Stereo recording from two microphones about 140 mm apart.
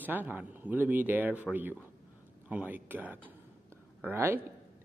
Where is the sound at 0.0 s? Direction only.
15° right (ahead or behind).